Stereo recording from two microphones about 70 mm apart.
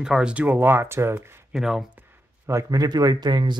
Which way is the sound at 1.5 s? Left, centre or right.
Centre.